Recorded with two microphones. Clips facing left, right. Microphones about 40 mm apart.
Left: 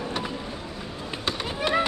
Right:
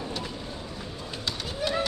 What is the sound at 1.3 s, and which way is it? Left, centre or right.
Run, left.